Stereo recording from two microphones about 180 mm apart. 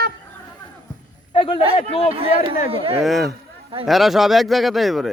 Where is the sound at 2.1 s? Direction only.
30° right (ahead or behind).